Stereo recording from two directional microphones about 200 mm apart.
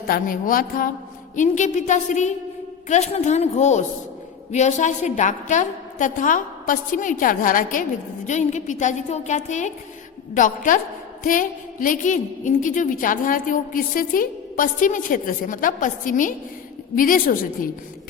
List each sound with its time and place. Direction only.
0.1 s a woman's voice: 45° left (ahead or behind)